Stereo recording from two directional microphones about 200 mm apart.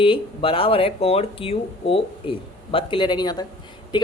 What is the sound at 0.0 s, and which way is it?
Speech, 25° left (ahead or behind).